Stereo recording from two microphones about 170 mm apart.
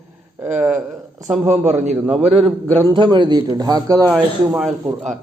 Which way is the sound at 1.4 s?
40° right (ahead or behind).